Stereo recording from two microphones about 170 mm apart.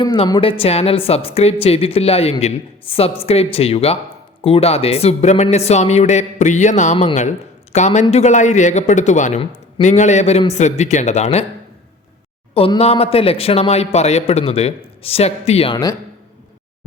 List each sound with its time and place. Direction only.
0.0 s a man's voice: 30° left (ahead or behind)
12.5 s a man's voice: 35° left (ahead or behind)